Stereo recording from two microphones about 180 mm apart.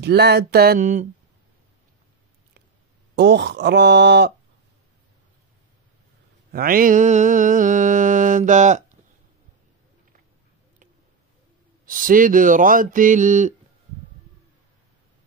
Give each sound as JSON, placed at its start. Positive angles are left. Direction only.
{"t": 0.0, "sound": "a sound", "side_deg": -65}
{"t": 3.2, "sound": "speech", "side_deg": -70}
{"t": 6.5, "sound": "mantra", "side_deg": -55}
{"t": 11.8, "sound": "mantra", "side_deg": -50}